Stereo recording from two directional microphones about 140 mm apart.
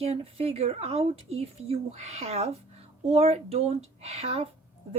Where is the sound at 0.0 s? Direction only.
45° right (ahead or behind).